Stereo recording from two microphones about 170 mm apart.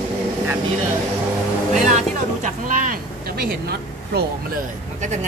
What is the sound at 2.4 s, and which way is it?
Speech, 45° right (ahead or behind).